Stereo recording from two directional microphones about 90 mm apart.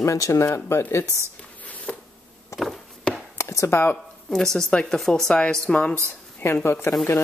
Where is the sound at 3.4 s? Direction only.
30° left (ahead or behind).